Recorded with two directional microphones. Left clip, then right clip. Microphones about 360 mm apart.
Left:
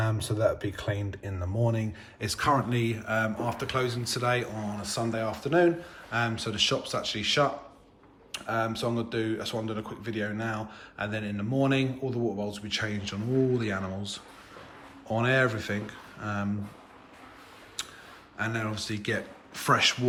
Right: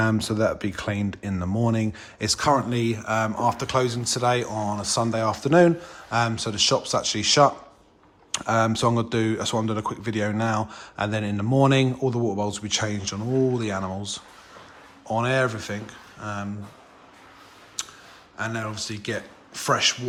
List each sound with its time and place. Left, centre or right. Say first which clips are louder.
0.0 s speech: right 5 dB; right; by 16.5 s centre
17.8 s clicking: right 4 dB; centre
18.3 s speech: right 2 dB; centre